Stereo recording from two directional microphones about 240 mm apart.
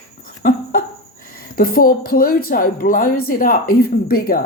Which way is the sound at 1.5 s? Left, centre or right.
Left.